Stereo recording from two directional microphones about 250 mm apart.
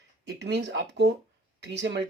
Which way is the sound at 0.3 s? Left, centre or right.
Right.